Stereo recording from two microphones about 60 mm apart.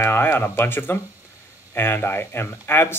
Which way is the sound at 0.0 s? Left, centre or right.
Left.